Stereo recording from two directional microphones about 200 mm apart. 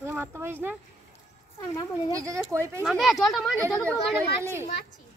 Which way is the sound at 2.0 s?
15° right (ahead or behind).